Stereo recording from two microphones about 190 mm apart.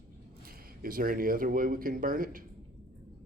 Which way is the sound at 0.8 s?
50° right (ahead or behind).